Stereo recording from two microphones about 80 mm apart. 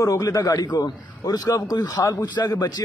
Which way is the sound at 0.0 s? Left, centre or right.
Left.